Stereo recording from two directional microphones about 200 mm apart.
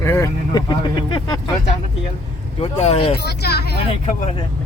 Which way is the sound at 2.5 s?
30° left (ahead or behind).